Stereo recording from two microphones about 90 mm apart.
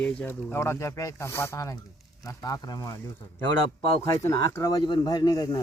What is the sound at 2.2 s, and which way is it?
Speech, 45° left (ahead or behind).